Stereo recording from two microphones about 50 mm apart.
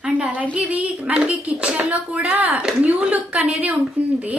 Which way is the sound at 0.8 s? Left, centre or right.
Right.